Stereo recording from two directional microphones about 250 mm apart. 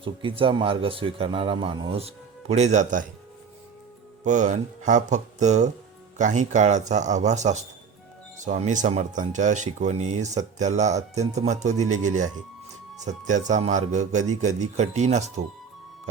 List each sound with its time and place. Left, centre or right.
0.0 s speech: right
4.2 s speech: right